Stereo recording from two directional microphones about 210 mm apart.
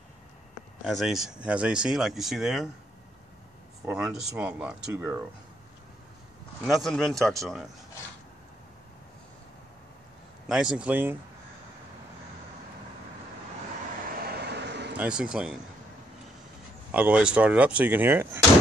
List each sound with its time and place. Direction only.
0.8 s speech: centre (ahead or behind)
3.8 s speech: 5° right (ahead or behind)
6.6 s speech: centre (ahead or behind)
10.5 s speech: 5° right (ahead or behind)
14.1 s vehicle: 50° right (ahead or behind)
15.0 s speech: 5° right (ahead or behind)
16.9 s speech: 5° right (ahead or behind)